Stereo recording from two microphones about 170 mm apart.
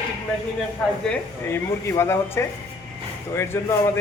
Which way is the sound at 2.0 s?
15° left (ahead or behind).